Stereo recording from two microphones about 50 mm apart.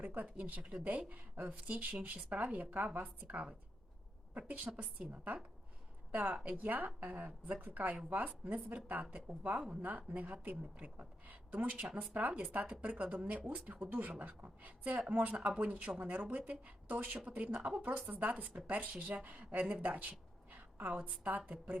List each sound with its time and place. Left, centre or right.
0.0 s speech: right
6.6 s speech: right
10.9 s speech: right